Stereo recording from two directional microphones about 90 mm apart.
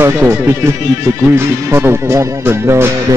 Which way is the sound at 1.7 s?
30° right (ahead or behind).